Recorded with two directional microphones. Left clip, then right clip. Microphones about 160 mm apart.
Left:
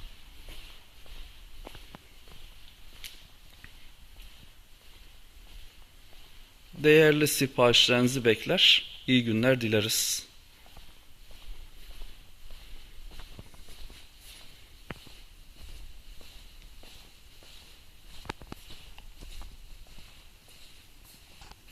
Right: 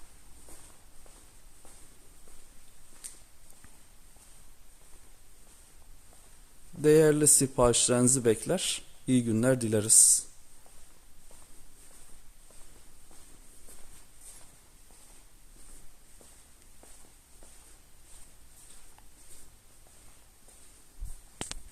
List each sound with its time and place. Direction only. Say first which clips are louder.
6.8 s speech: left 2 dB; 10° right (ahead or behind)